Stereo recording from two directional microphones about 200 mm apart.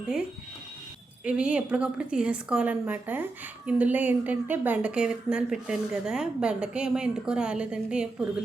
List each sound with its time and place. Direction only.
1.2 s speech: 5° right (ahead or behind)